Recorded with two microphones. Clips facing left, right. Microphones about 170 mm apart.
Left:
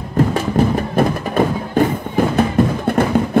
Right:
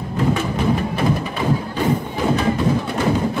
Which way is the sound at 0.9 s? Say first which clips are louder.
Left 5 dB; 50° left (ahead or behind).